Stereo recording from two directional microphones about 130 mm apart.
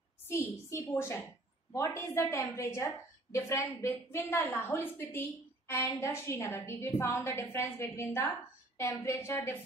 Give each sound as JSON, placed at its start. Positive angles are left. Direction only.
{"t": 0.3, "sound": "a woman's voice", "side_deg": 20}